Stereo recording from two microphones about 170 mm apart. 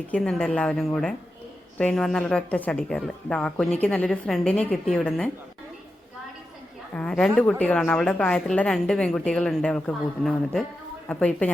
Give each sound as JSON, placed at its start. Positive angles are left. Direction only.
{"t": 0.1, "sound": "speech", "side_deg": 5}
{"t": 6.9, "sound": "speech", "side_deg": 5}